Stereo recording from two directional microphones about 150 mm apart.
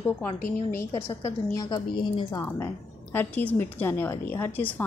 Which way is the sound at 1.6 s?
30° left (ahead or behind).